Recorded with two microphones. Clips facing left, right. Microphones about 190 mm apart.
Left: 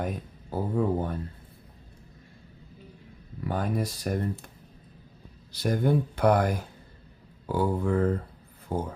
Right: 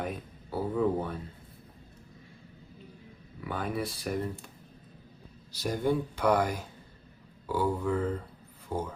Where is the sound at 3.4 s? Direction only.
45° left (ahead or behind).